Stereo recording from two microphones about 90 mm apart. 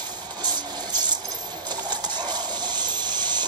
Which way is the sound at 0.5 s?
50° right (ahead or behind).